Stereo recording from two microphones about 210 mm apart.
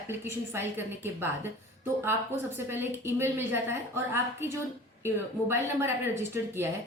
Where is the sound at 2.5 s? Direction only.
10° right (ahead or behind).